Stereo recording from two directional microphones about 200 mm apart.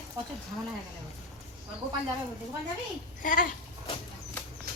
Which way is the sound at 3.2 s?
40° left (ahead or behind).